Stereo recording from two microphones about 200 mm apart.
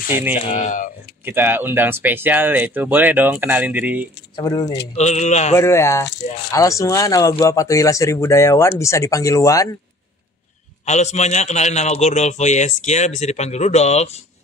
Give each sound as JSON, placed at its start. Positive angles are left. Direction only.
{"t": 0.1, "sound": "speech", "side_deg": -10}
{"t": 0.4, "sound": "a man's voice", "side_deg": 35}
{"t": 1.2, "sound": "speech", "side_deg": -10}
{"t": 4.4, "sound": "speech", "side_deg": 20}
{"t": 4.9, "sound": "a man's voice", "side_deg": 35}
{"t": 5.5, "sound": "speech", "side_deg": 15}
{"t": 10.9, "sound": "a man's voice", "side_deg": 35}